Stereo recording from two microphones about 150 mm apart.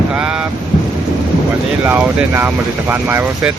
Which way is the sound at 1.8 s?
10° right (ahead or behind).